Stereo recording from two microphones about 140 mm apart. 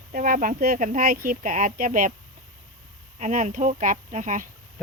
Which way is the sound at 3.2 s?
60° right (ahead or behind).